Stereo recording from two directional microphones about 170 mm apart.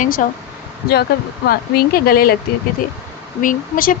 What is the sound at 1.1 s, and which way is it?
Speech, 70° left (ahead or behind).